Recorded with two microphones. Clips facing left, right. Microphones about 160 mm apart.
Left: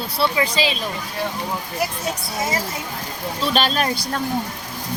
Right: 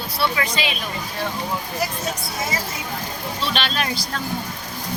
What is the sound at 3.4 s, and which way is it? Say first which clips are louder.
Speech: left 5 dB; 40° left (ahead or behind).